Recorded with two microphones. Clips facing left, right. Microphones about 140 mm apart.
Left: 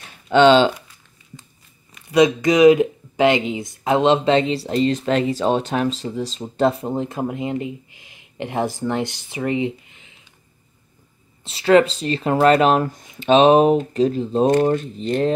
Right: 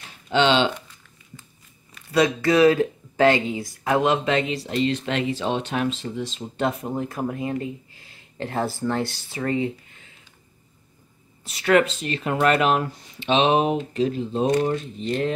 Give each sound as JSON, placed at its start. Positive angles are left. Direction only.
{"t": 0.3, "sound": "speech", "side_deg": 45}
{"t": 2.1, "sound": "speech", "side_deg": 15}
{"t": 11.4, "sound": "speech", "side_deg": 30}